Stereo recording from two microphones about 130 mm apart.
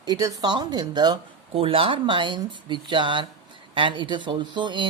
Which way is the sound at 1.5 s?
45° right (ahead or behind).